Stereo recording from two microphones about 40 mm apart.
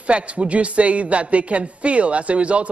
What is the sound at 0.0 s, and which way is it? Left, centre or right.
A woman's voice, right.